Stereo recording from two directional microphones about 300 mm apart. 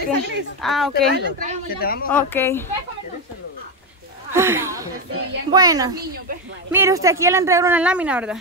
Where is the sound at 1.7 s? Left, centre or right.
Left.